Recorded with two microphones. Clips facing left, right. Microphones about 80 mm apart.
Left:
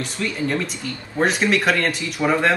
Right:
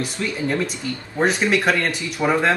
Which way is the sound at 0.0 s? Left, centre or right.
Centre.